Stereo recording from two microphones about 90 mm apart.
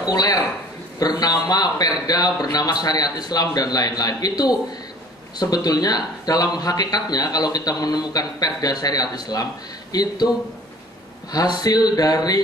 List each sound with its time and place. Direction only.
0.1 s speech: 45° left (ahead or behind)
11.3 s speech: 50° left (ahead or behind)